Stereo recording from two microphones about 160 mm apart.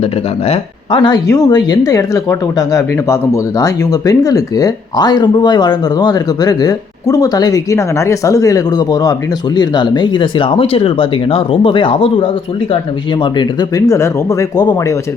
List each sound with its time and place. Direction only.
0.0 s speech: 40° left (ahead or behind); by 14.9 s 25° left (ahead or behind)